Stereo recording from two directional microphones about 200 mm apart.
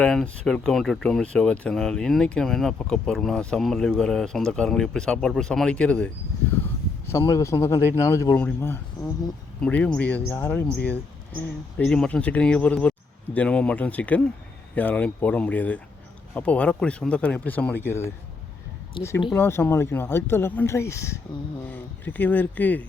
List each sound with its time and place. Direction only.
0.0 s speech: 5° left (ahead or behind)
7.1 s speech: 15° left (ahead or behind)
11.8 s speech: 5° left (ahead or behind)
19.0 s speech: 25° left (ahead or behind)
19.4 s speech: 10° left (ahead or behind)